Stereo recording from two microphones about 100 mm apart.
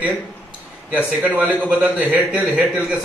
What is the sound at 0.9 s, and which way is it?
A man's voice, 15° right (ahead or behind).